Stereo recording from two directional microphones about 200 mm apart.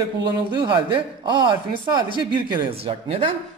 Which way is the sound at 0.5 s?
25° right (ahead or behind).